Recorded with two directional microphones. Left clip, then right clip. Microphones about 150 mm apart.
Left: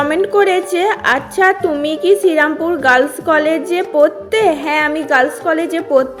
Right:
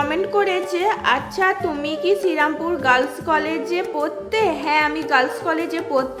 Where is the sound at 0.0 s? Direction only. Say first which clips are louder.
Left 7 dB; 25° left (ahead or behind).